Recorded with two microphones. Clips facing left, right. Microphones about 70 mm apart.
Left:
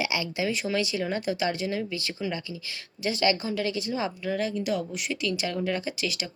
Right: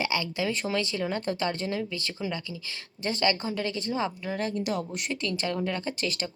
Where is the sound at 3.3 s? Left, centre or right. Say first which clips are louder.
Left 2 dB; right.